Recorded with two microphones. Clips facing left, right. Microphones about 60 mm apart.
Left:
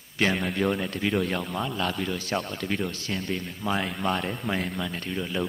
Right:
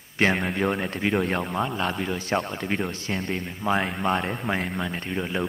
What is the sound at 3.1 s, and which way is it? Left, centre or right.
Speech, right.